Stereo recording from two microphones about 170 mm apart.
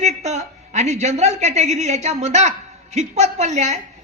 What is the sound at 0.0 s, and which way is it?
A woman's voice, 40° right (ahead or behind).